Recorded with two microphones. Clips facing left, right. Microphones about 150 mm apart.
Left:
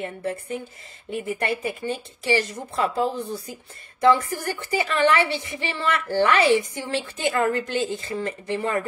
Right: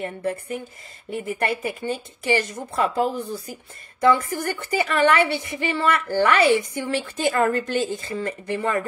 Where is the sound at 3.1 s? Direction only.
30° left (ahead or behind).